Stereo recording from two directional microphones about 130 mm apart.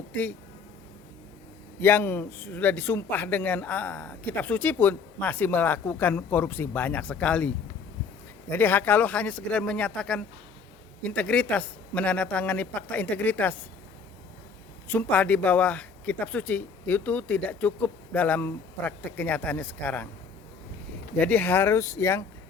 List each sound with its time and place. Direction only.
0.1 s speech: 15° left (ahead or behind)
1.8 s speech: 15° left (ahead or behind)
14.8 s speech: 15° left (ahead or behind)
21.2 s speech: 10° left (ahead or behind)